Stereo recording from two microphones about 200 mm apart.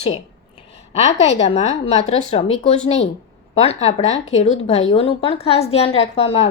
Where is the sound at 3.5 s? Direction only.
30° left (ahead or behind).